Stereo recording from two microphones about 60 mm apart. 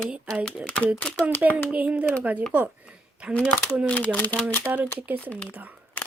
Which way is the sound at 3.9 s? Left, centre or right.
Left.